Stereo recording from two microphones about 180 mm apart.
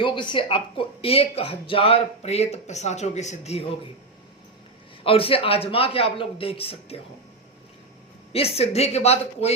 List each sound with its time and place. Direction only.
0.0 s speech: 25° left (ahead or behind)
5.0 s speech: 30° left (ahead or behind)
8.3 s speech: 35° left (ahead or behind)